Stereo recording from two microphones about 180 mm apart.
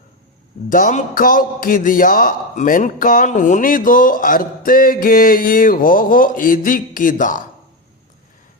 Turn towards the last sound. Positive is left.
turn(degrees=50)  # may be behind; listen again after turning